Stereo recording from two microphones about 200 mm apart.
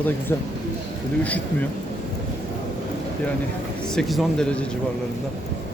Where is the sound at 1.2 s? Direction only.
5° left (ahead or behind).